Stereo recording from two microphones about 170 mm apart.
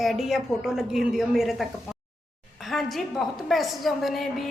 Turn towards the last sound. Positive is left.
turn(degrees=0)  # may be behind; listen again after turning